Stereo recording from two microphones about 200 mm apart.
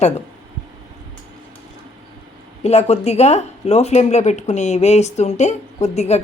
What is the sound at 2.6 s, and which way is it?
A woman's voice, 35° left (ahead or behind).